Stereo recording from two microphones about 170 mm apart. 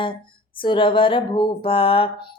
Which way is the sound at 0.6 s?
30° left (ahead or behind).